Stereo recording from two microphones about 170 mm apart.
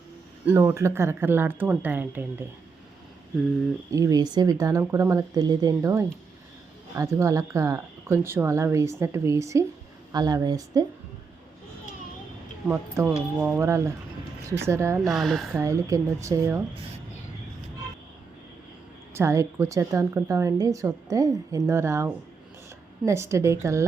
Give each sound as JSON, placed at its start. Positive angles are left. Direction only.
{"t": 0.4, "sound": "a woman's voice", "side_deg": -10}
{"t": 3.9, "sound": "a woman's voice", "side_deg": -20}
{"t": 12.6, "sound": "a woman's voice", "side_deg": -15}
{"t": 15.0, "sound": "speech", "side_deg": 0}
{"t": 15.5, "sound": "a woman's voice", "side_deg": -20}
{"t": 19.1, "sound": "a woman's voice", "side_deg": -15}